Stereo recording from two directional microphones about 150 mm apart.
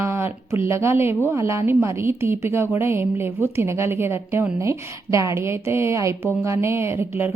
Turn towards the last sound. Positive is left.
turn(degrees=-15)  # may be behind; listen again after turning